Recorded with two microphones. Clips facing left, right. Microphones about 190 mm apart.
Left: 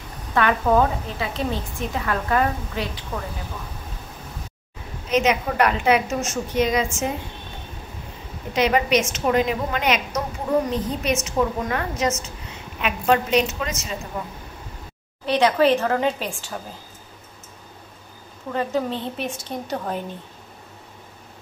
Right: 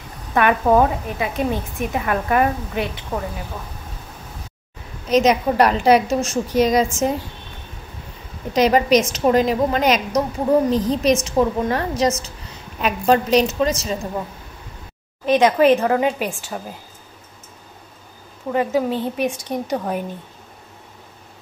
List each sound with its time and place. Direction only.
0.3 s a woman's voice: 20° right (ahead or behind)
3.1 s a woman's voice: 35° right (ahead or behind)
5.1 s a woman's voice: 40° right (ahead or behind)
8.5 s a woman's voice: 40° right (ahead or behind)
15.3 s a woman's voice: 15° right (ahead or behind)
18.5 s a woman's voice: 10° right (ahead or behind)